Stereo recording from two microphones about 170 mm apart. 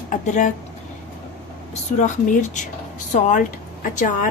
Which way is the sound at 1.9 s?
45° left (ahead or behind).